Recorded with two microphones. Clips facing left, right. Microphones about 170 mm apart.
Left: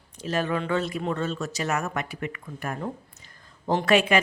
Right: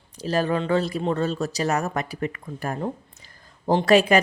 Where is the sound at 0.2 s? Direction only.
35° right (ahead or behind).